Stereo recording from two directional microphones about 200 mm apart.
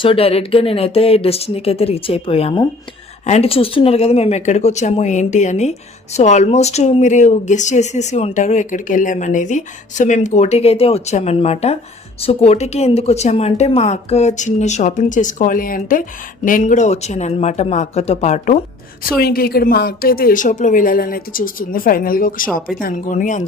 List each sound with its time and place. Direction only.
0.0 s a woman's voice: 30° left (ahead or behind)
19.0 s a woman's voice: 50° left (ahead or behind)